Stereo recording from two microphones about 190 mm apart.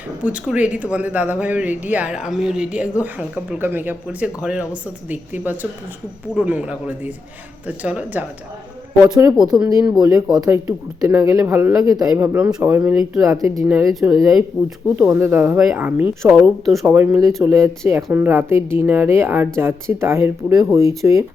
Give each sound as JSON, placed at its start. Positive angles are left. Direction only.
{"t": 0.2, "sound": "a woman's voice", "side_deg": -5}
{"t": 9.1, "sound": "a woman's voice", "side_deg": -20}
{"t": 13.2, "sound": "a woman's voice", "side_deg": -20}
{"t": 13.9, "sound": "speech", "side_deg": 0}
{"t": 14.9, "sound": "a woman's voice", "side_deg": -10}
{"t": 16.8, "sound": "a woman's voice", "side_deg": -10}